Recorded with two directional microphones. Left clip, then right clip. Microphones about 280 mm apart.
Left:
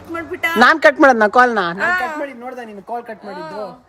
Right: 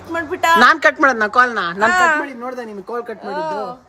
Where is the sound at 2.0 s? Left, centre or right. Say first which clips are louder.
Right 8 dB; right.